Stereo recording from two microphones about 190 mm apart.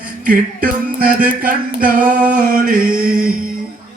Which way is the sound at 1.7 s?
45° right (ahead or behind).